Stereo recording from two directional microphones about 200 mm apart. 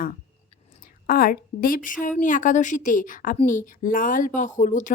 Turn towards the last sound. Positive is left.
turn(degrees=40)  # may be behind; listen again after turning